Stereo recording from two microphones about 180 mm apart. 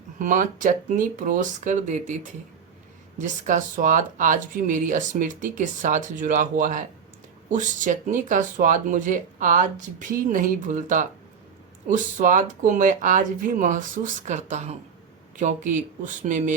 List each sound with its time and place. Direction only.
0.2 s speech: 45° right (ahead or behind)
3.2 s speech: 45° right (ahead or behind)